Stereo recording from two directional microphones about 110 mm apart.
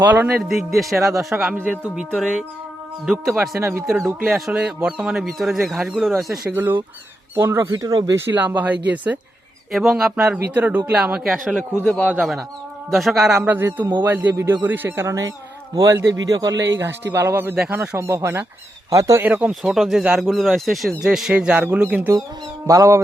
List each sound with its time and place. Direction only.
0.0 s a man's voice: 15° right (ahead or behind)
0.3 s speech: centre (ahead or behind)
1.5 s a man's voice: 15° right (ahead or behind)
3.6 s speech: 25° right (ahead or behind)
3.8 s speech: centre (ahead or behind)
6.5 s a man's voice: 20° right (ahead or behind)
7.6 s a man's voice: 30° right (ahead or behind)
8.1 s a man's voice: 20° right (ahead or behind); by 13.3 s 5° right (ahead or behind)
13.4 s a man's voice: 20° right (ahead or behind)
17.1 s speech: 20° right (ahead or behind)
19.2 s a man's voice: 15° right (ahead or behind)
22.6 s a man's voice: 30° right (ahead or behind)